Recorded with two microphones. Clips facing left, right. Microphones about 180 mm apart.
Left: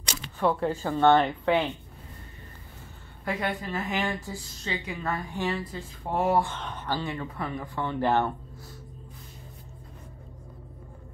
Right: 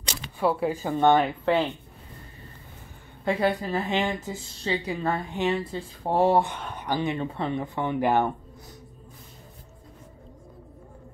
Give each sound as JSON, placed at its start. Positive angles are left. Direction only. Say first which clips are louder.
{"t": 0.4, "sound": "speech", "louder": "right 1 dB", "side_deg": -10}
{"t": 1.2, "sound": "speech", "louder": "right 1 dB", "side_deg": 0}
{"t": 3.3, "sound": "speech", "louder": "right 6 dB", "side_deg": -30}
{"t": 6.4, "sound": "speech", "louder": "right 1 dB", "side_deg": -10}